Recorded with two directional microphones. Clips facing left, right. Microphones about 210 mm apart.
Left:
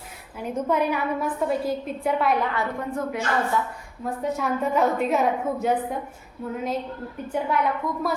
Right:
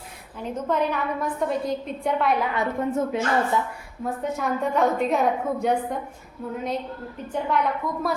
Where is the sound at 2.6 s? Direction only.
25° right (ahead or behind).